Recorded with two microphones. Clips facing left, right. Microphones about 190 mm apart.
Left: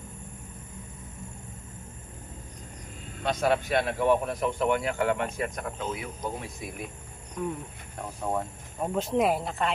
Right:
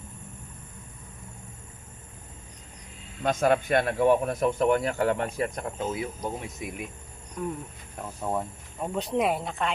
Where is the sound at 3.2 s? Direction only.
45° right (ahead or behind); by 6.6 s 25° right (ahead or behind).